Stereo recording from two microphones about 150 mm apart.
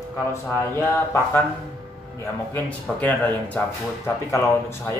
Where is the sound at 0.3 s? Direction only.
15° left (ahead or behind).